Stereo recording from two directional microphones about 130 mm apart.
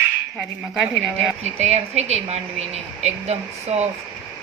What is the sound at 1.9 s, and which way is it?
Speech, 60° right (ahead or behind).